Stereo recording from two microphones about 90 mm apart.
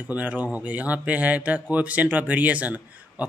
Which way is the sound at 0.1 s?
15° right (ahead or behind).